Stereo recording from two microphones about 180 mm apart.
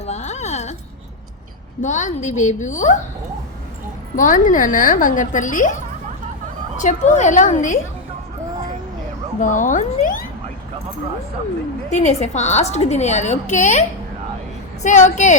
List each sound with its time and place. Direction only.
0.0 s a sound: 40° left (ahead or behind)
1.8 s a woman's voice: 40° left (ahead or behind)
4.1 s a woman's voice: 45° left (ahead or behind)
6.8 s a woman's voice: 40° left (ahead or behind)
9.4 s speech: 45° left (ahead or behind)
11.9 s a woman's voice: 40° left (ahead or behind)